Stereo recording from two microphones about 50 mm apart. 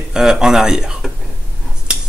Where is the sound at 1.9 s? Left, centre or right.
Centre.